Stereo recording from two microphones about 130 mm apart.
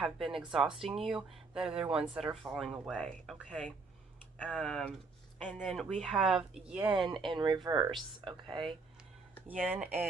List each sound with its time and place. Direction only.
0.0 s speech: centre (ahead or behind)
4.4 s speech: 5° left (ahead or behind)
5.9 s speech: centre (ahead or behind)
6.9 s speech: 35° right (ahead or behind)
9.5 s speech: 10° right (ahead or behind)